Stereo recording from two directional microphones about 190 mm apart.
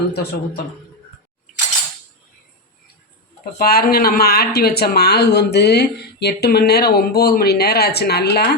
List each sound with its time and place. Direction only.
0.1 s speech: 60° left (ahead or behind)
3.6 s speech: 55° left (ahead or behind)